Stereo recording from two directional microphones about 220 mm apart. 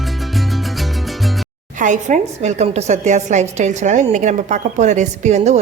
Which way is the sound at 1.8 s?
35° right (ahead or behind).